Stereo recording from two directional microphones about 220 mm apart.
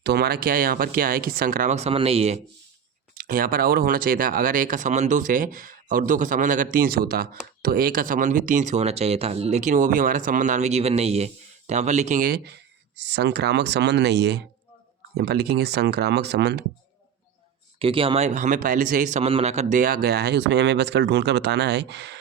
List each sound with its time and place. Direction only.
0.0 s speech: 45° right (ahead or behind); by 2.4 s 30° right (ahead or behind)
3.2 s a man's voice: 40° right (ahead or behind)
17.7 s a man's voice: 25° right (ahead or behind); by 22.2 s 50° right (ahead or behind)